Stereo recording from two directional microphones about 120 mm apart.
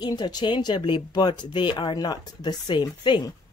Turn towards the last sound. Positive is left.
turn(degrees=40)  # may be behind; listen again after turning